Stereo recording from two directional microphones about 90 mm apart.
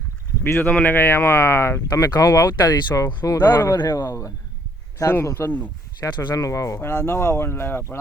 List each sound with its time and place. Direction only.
0.4 s speech: 25° left (ahead or behind)
1.9 s speech: 50° left (ahead or behind)
3.3 s speech: 25° left (ahead or behind)
6.7 s speech: 25° left (ahead or behind)